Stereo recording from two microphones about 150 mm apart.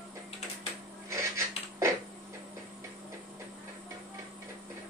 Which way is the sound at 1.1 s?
20° right (ahead or behind).